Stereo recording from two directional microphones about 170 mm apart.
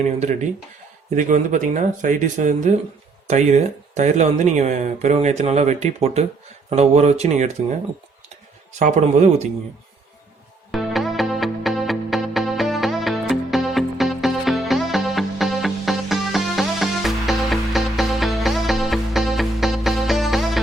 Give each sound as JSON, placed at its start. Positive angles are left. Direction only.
{"t": 0.0, "sound": "speech", "side_deg": -45}
{"t": 8.8, "sound": "speech", "side_deg": -40}
{"t": 10.7, "sound": "music", "side_deg": 0}